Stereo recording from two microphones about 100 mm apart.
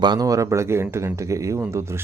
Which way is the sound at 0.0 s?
45° right (ahead or behind).